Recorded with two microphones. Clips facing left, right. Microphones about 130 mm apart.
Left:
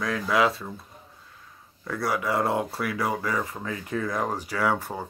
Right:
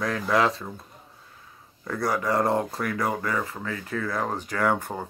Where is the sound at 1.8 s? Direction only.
Centre (ahead or behind).